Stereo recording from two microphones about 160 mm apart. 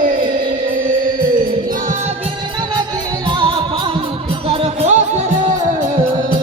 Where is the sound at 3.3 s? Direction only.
30° right (ahead or behind); by 5.8 s 50° right (ahead or behind).